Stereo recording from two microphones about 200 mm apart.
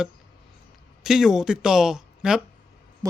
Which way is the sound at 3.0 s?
20° right (ahead or behind).